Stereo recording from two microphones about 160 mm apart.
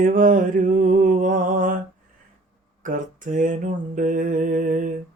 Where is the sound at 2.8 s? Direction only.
55° right (ahead or behind).